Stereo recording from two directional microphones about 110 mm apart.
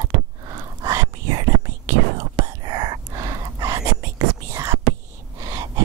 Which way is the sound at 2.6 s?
40° right (ahead or behind).